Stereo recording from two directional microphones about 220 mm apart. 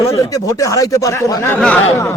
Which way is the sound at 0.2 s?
15° left (ahead or behind).